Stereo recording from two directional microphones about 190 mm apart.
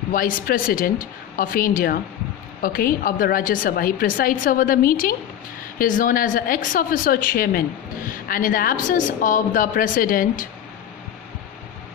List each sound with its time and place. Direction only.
0.1 s a woman's voice: 45° left (ahead or behind)